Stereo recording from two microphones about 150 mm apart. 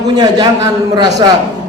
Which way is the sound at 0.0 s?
25° right (ahead or behind).